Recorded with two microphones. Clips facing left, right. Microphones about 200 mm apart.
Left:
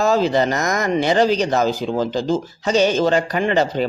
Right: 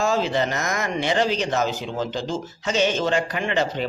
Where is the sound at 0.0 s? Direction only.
40° left (ahead or behind).